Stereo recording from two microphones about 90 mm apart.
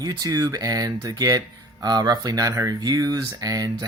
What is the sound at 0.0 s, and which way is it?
Speech, 45° right (ahead or behind).